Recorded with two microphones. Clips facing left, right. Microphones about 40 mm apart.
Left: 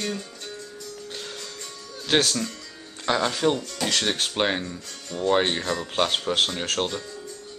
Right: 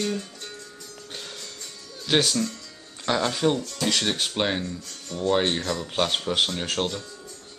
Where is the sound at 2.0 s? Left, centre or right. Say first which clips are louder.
Even; centre.